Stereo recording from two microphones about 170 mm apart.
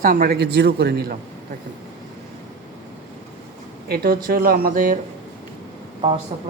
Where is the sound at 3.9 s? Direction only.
60° right (ahead or behind).